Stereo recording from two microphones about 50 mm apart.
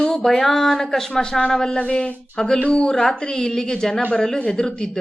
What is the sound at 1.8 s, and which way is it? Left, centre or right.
A woman's voice, left.